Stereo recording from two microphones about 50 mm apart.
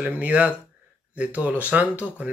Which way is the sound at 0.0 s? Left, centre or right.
Right.